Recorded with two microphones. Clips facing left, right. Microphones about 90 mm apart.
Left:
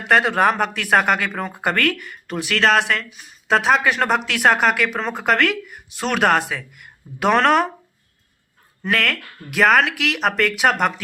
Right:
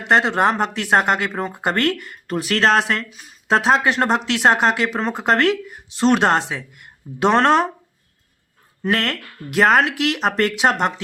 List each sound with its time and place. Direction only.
0.1 s speech: 25° right (ahead or behind)
8.8 s speech: 30° right (ahead or behind)